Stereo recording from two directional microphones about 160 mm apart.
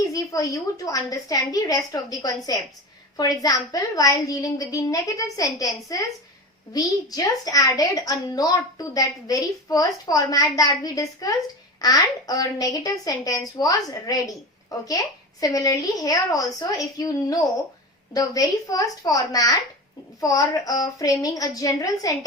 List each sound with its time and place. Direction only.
0.0 s a woman's voice: 20° left (ahead or behind)